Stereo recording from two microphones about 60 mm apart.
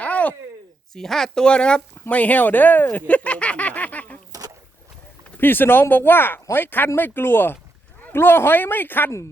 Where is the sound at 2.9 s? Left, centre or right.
Left.